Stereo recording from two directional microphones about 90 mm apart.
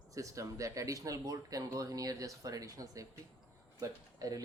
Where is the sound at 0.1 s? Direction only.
40° right (ahead or behind).